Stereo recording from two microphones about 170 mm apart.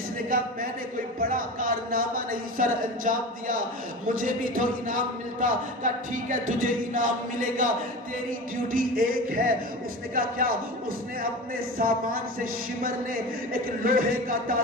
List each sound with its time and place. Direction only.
1.2 s a man's voice: 55° right (ahead or behind)
8.7 s speech: 55° right (ahead or behind)
11.8 s speech: 55° right (ahead or behind)